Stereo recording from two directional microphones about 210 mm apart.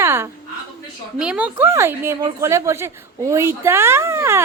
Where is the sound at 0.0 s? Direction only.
10° right (ahead or behind).